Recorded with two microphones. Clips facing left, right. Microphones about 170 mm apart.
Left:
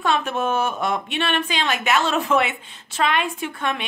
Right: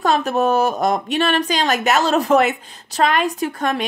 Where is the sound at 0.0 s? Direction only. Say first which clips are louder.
Right 5 dB; 40° right (ahead or behind).